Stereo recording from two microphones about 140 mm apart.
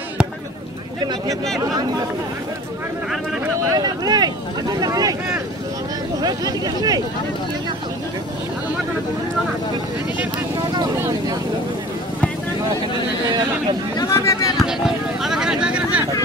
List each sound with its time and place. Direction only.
3.7 s speech: 30° right (ahead or behind)
6.2 s speech: 30° right (ahead or behind)
11.0 s vehicle: 20° right (ahead or behind)
13.9 s a sound: 20° left (ahead or behind)
14.6 s vehicle: 5° right (ahead or behind)